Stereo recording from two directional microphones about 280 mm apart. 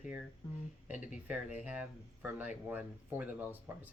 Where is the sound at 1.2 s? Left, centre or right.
Centre.